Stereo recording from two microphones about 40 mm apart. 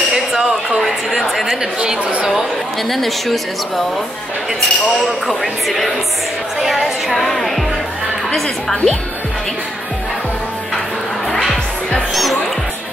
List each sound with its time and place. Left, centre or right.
0.1 s a sound: centre
1.8 s a woman's voice: right
2.9 s a woman's voice: centre
5.4 s a woman's voice: centre
12.1 s music: centre